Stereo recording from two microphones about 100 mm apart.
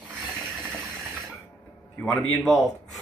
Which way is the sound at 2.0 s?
10° left (ahead or behind).